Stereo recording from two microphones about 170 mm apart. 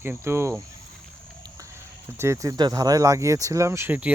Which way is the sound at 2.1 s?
15° right (ahead or behind).